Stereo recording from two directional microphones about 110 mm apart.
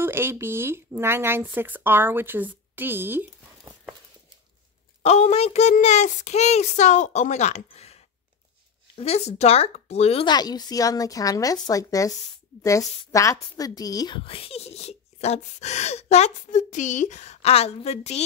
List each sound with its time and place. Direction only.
0.0 s speech: 20° right (ahead or behind)
5.0 s speech: 70° left (ahead or behind)
10.2 s a woman's voice: 40° left (ahead or behind)
13.1 s a woman's voice: 30° left (ahead or behind)
14.1 s speech: 55° left (ahead or behind); by 18.2 s 75° left (ahead or behind)